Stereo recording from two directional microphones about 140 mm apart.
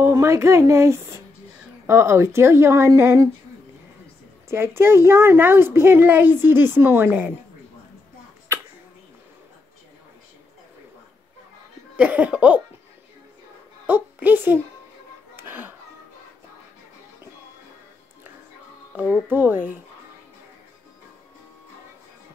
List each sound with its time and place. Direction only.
0.0 s a woman's voice: 20° right (ahead or behind)
4.5 s a woman's voice: 15° right (ahead or behind)
12.0 s a woman's voice: 10° right (ahead or behind)
13.8 s a woman's voice: 15° right (ahead or behind)
15.3 s music: 15° right (ahead or behind)
18.9 s a woman's voice: 10° right (ahead or behind)